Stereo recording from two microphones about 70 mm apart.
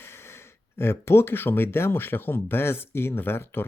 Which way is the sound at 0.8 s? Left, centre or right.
Left.